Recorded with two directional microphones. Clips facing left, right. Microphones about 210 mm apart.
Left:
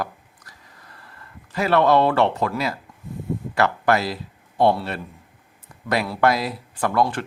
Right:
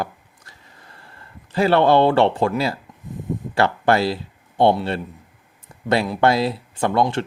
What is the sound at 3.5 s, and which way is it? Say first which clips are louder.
Speech: right 2 dB; 30° right (ahead or behind).